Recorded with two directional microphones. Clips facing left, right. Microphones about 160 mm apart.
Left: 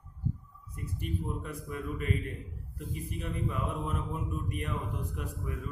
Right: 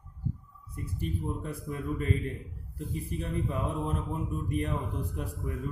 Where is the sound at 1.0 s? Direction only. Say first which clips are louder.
Right 2 dB; 30° right (ahead or behind).